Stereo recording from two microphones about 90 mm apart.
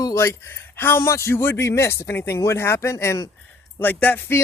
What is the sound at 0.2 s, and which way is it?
A man's voice, 30° left (ahead or behind).